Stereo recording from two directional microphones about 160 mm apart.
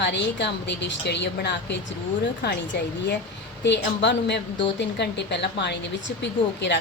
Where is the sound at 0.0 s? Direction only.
90° left.